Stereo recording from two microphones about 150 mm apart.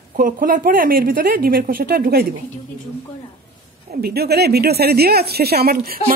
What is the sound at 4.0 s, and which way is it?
Speech, 90° right.